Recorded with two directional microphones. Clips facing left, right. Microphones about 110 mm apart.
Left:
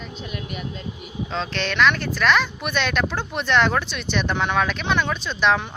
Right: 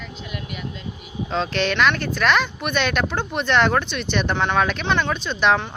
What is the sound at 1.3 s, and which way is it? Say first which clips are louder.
Speech: right 5 dB; 5° right (ahead or behind).